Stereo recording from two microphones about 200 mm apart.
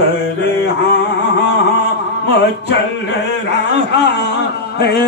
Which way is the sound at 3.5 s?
60° left (ahead or behind).